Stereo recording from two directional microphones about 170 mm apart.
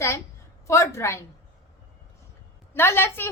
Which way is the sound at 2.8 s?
15° left (ahead or behind).